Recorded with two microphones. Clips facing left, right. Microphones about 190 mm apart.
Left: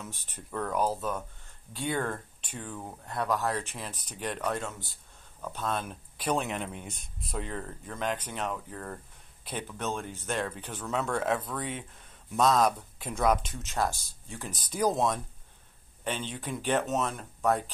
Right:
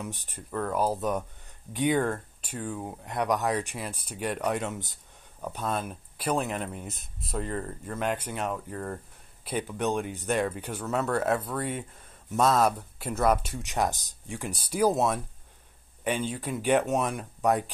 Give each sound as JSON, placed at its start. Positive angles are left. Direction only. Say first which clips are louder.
{"t": 0.5, "sound": "speech", "louder": "right 2 dB", "side_deg": 0}
{"t": 0.9, "sound": "speech", "louder": "right 5 dB", "side_deg": -20}